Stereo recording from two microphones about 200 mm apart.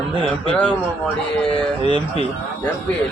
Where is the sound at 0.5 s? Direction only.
5° left (ahead or behind).